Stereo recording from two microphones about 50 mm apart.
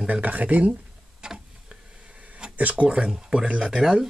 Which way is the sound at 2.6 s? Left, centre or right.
Right.